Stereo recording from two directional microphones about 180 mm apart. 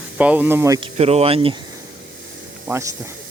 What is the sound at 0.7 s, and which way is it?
Speech, 35° right (ahead or behind).